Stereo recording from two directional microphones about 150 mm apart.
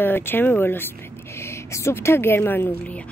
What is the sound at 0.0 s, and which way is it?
A woman's voice, 15° left (ahead or behind).